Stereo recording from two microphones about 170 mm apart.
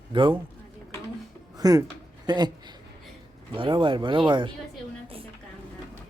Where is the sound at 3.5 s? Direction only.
30° right (ahead or behind).